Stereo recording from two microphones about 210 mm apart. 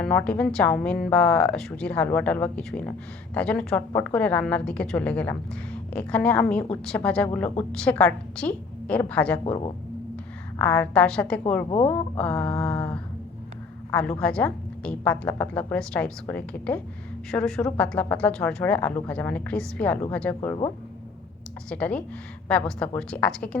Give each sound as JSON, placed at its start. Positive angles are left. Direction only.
{"t": 0.0, "sound": "a woman's voice", "side_deg": 5}
{"t": 9.4, "sound": "speech", "side_deg": 25}
{"t": 10.6, "sound": "a woman's voice", "side_deg": 5}
{"t": 21.7, "sound": "a woman's voice", "side_deg": 5}